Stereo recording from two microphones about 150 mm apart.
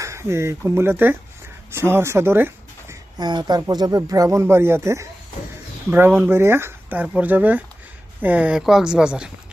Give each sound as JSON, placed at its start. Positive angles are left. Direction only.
{"t": 0.0, "sound": "speech", "side_deg": -20}
{"t": 2.9, "sound": "speech", "side_deg": -30}